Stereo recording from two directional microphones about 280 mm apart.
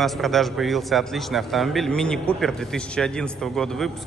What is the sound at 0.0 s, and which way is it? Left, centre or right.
A man's voice, centre.